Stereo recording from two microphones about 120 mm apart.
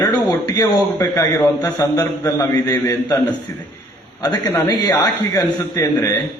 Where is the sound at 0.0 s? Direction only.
30° left (ahead or behind).